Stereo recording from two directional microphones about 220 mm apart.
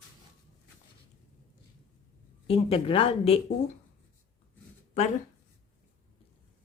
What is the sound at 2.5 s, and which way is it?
Speech, 25° left (ahead or behind).